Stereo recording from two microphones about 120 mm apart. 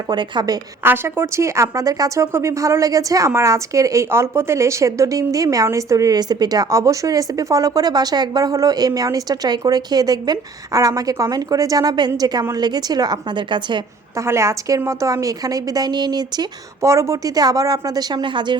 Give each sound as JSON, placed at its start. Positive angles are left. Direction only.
{"t": 0.1, "sound": "a woman's voice", "side_deg": -35}
{"t": 0.8, "sound": "a woman's voice", "side_deg": -20}
{"t": 14.2, "sound": "a woman's voice", "side_deg": -25}